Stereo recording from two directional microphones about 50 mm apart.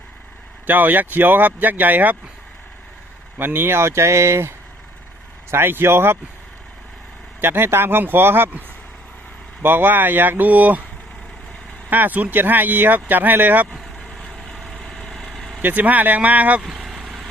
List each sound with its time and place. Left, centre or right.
0.7 s speech: right
3.3 s speech: right
5.5 s speech: right
7.4 s speech: right
9.6 s speech: right
11.9 s speech: right
14.3 s vehicle: centre
15.6 s speech: right
16.6 s vehicle: centre